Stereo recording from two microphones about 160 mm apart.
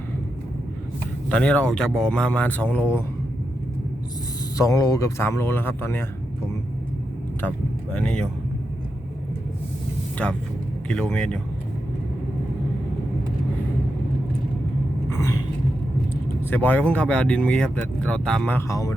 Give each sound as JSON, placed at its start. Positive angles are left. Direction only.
{"t": 1.3, "sound": "speech", "side_deg": 5}
{"t": 4.5, "sound": "speech", "side_deg": 20}
{"t": 7.9, "sound": "speech", "side_deg": 5}
{"t": 10.8, "sound": "speech", "side_deg": 5}
{"t": 15.1, "sound": "a sound", "side_deg": 20}
{"t": 16.5, "sound": "speech", "side_deg": 10}